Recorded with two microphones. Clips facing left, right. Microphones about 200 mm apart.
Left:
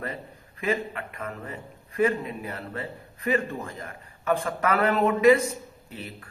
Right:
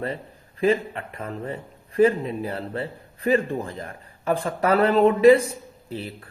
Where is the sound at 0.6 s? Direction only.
30° right (ahead or behind).